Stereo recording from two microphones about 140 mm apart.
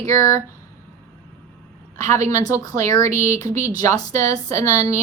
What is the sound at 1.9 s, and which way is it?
Speech, 20° left (ahead or behind).